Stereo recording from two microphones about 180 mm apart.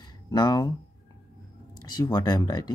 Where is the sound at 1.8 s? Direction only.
25° left (ahead or behind).